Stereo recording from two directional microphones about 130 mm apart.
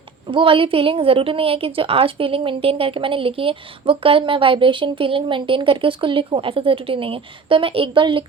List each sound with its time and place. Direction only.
0.3 s a woman's voice: 40° right (ahead or behind)